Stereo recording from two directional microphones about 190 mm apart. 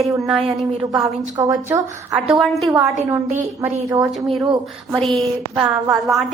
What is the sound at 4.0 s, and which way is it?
A woman's voice, centre (ahead or behind).